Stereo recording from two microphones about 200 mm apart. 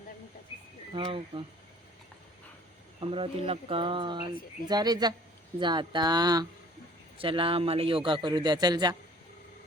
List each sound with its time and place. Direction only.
0.9 s a man's voice: 25° right (ahead or behind)
3.0 s a man's voice: 25° right (ahead or behind)